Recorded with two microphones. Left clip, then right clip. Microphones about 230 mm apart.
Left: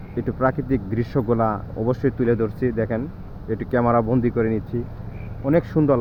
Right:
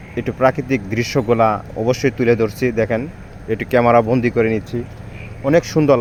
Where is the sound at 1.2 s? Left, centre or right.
Right.